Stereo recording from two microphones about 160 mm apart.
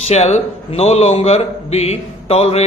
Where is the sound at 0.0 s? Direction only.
45° left (ahead or behind).